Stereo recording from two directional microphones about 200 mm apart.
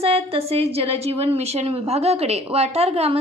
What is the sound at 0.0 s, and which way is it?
A woman's voice, 30° right (ahead or behind).